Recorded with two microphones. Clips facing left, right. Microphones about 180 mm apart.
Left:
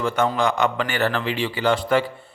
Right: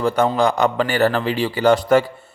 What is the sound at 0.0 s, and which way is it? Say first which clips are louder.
A man's voice: right 4 dB; 35° right (ahead or behind).